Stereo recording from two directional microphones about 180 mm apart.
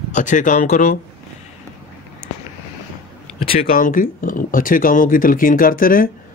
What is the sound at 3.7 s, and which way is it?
Speech, 50° left (ahead or behind).